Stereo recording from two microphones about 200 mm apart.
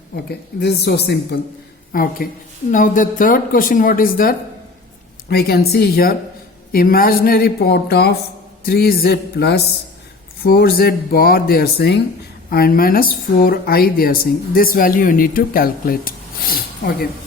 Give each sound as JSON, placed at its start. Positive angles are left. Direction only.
{"t": 0.3, "sound": "speech", "side_deg": 55}